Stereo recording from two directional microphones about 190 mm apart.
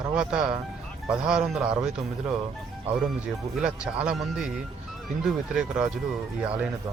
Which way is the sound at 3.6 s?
5° right (ahead or behind).